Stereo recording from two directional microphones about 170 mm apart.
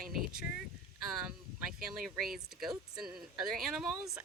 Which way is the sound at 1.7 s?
5° right (ahead or behind).